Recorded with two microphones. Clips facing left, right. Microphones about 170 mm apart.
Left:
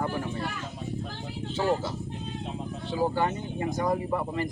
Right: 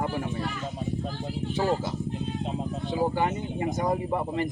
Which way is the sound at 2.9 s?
15° right (ahead or behind).